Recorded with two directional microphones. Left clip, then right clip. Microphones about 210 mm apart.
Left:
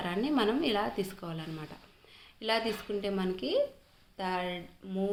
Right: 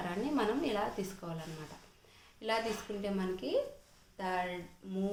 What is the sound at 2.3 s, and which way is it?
A woman's voice, 30° left (ahead or behind).